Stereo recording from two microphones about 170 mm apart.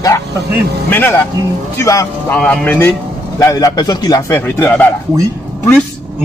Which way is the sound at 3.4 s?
20° left (ahead or behind).